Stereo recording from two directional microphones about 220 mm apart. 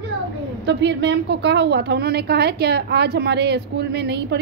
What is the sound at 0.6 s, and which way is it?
A woman's voice, 55° right (ahead or behind).